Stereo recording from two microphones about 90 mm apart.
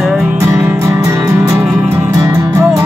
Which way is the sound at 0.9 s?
35° right (ahead or behind).